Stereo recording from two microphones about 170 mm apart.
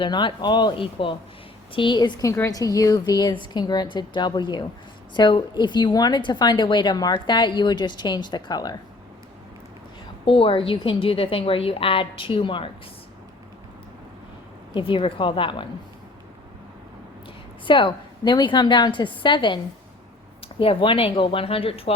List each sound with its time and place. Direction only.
0.0 s a woman's voice: 30° left (ahead or behind)
10.2 s a woman's voice: 30° left (ahead or behind)
14.8 s a woman's voice: 30° left (ahead or behind)
17.7 s a woman's voice: 30° left (ahead or behind)
20.6 s a woman's voice: 30° left (ahead or behind)